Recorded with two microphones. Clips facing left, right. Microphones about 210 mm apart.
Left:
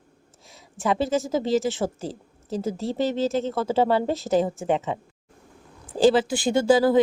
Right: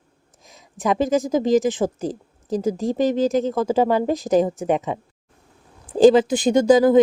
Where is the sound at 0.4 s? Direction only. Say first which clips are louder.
Right 3 dB; 15° right (ahead or behind).